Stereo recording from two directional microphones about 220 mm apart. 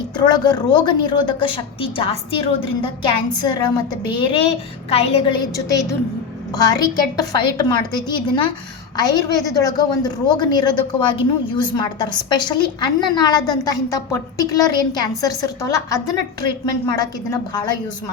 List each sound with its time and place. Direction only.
0.3 s a woman's voice: 20° left (ahead or behind)